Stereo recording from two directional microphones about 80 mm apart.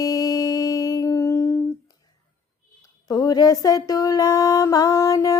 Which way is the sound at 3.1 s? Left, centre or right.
Left.